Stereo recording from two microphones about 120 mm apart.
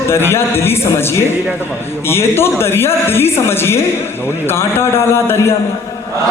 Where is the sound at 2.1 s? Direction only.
20° left (ahead or behind).